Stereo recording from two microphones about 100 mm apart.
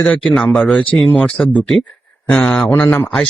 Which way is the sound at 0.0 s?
5° left (ahead or behind).